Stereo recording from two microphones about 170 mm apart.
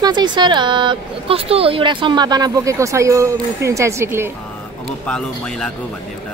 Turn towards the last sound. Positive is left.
turn(degrees=5)  # may be behind; listen again after turning